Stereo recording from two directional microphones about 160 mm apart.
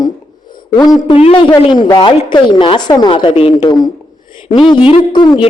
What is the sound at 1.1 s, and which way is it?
Speech, 35° left (ahead or behind).